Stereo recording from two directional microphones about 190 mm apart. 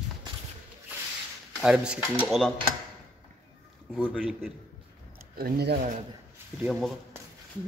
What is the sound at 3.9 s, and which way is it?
Speech, 5° left (ahead or behind).